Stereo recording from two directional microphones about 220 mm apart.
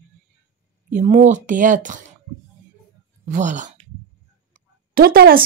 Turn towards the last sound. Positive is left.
turn(degrees=-45)  # may be behind; listen again after turning